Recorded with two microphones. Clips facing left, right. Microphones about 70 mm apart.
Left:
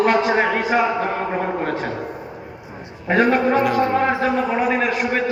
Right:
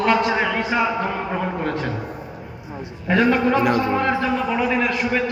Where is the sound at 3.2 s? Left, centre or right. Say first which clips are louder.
Left 1 dB; left.